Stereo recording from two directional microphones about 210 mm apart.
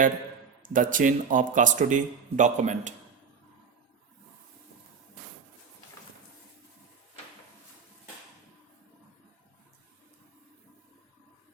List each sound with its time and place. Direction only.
0.7 s speech: 40° right (ahead or behind)